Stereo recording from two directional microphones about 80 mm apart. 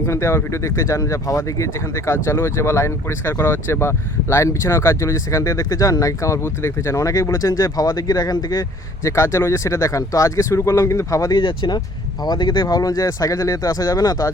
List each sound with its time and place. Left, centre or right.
0.0 s speech: left
9.0 s speech: left
11.3 s speech: left
12.6 s speech: left